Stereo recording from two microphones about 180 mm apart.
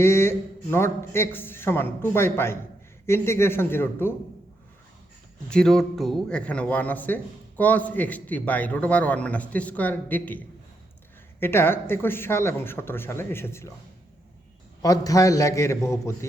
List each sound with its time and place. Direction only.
0.0 s speech: 15° left (ahead or behind)
5.5 s speech: 5° left (ahead or behind)
14.8 s speech: 20° left (ahead or behind)